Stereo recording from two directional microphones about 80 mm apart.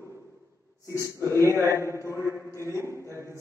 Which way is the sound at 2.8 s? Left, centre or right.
Right.